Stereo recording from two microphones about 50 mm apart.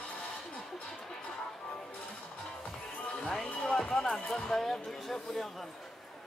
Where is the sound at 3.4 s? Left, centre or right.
Left.